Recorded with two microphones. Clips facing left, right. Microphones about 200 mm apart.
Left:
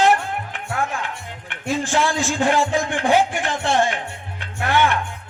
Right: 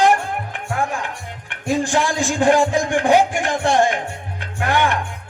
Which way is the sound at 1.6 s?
15° right (ahead or behind).